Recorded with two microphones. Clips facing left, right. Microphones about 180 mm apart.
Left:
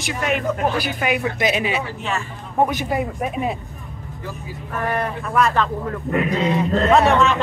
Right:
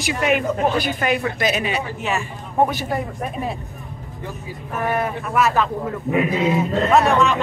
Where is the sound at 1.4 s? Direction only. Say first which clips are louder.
Left 1 dB; 20° left (ahead or behind).